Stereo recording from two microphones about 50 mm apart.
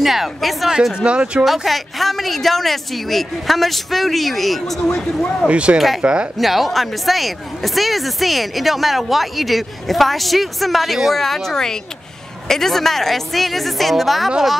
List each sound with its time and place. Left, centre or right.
0.0 s speech: centre
1.0 s speech: right
1.4 s speech: centre
5.5 s speech: right
5.8 s speech: centre